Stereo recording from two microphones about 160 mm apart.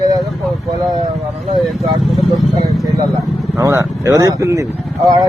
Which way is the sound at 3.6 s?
20° right (ahead or behind).